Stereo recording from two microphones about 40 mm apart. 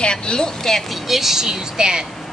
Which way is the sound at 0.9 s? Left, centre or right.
Centre.